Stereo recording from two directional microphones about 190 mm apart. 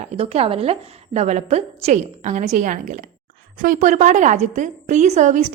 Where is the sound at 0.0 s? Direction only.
30° right (ahead or behind).